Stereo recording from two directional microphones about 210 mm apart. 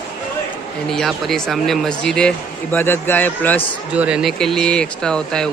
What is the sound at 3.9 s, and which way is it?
Speech, 5° right (ahead or behind).